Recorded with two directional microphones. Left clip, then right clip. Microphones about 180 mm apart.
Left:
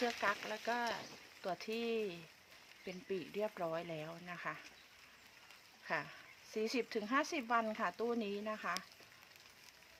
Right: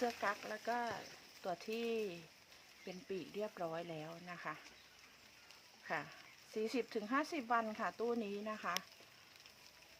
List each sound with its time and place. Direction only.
0.0 s speech: 25° left (ahead or behind)
5.9 s speech: 30° left (ahead or behind)